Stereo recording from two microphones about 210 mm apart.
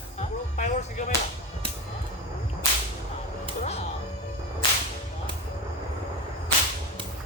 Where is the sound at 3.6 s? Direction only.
30° left (ahead or behind).